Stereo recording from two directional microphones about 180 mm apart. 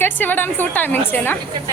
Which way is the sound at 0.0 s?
10° left (ahead or behind).